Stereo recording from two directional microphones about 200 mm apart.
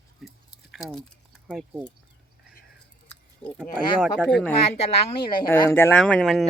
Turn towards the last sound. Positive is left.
turn(degrees=0)  # may be behind; listen again after turning